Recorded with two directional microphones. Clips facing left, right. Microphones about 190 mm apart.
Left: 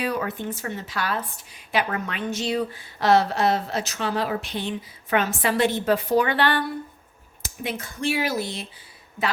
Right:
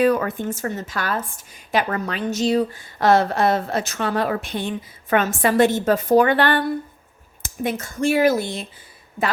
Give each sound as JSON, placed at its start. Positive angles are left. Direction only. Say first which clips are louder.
{"t": 0.0, "sound": "a woman's voice", "louder": "right 8 dB", "side_deg": -50}